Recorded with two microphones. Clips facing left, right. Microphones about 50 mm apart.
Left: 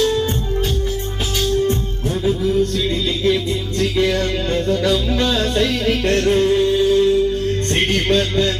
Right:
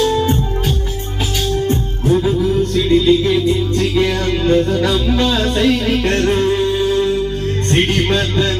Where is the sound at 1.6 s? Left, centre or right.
Centre.